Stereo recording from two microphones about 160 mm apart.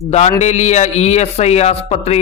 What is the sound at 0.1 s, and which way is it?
A man's voice, 45° left (ahead or behind).